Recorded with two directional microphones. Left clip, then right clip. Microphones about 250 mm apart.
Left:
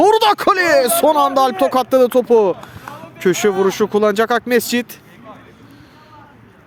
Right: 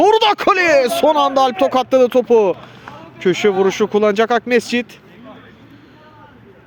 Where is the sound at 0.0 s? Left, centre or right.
Centre.